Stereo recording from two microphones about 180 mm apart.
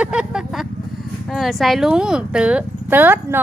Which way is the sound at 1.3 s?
Centre (ahead or behind).